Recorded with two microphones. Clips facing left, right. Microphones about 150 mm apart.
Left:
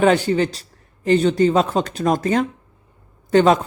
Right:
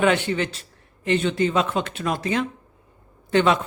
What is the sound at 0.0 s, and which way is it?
A man's voice, 35° left (ahead or behind).